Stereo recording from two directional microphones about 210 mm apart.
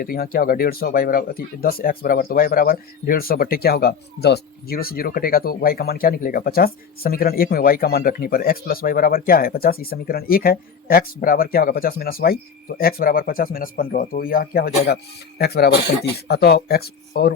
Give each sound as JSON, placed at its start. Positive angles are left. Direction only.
{"t": 0.0, "sound": "speech", "side_deg": 45}